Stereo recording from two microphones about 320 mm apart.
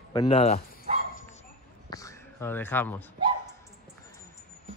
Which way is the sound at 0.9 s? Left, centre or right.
Right.